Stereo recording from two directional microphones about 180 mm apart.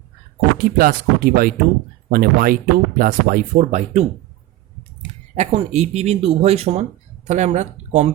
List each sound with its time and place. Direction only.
0.6 s speech: 50° right (ahead or behind)
5.3 s speech: 40° right (ahead or behind)